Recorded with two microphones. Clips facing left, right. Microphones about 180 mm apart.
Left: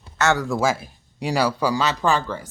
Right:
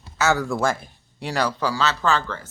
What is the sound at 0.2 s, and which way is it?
Speech, centre (ahead or behind).